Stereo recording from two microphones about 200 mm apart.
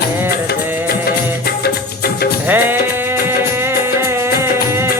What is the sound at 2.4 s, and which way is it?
Music, 10° right (ahead or behind).